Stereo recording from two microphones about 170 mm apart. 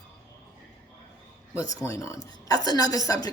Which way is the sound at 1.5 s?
20° left (ahead or behind).